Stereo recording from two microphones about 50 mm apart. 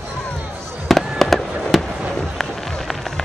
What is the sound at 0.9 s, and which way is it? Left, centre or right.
Fireworks, centre.